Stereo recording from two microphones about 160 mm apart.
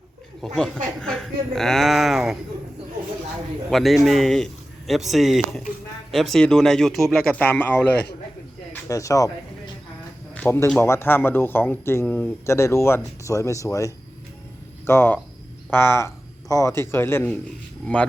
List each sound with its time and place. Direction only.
0.4 s speech: 5° left (ahead or behind)
3.7 s speech: centre (ahead or behind)
8.7 s speech: 20° left (ahead or behind)
10.3 s speech: 15° left (ahead or behind)